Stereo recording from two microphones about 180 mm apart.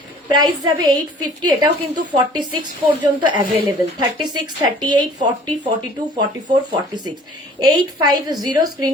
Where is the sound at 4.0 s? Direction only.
25° right (ahead or behind).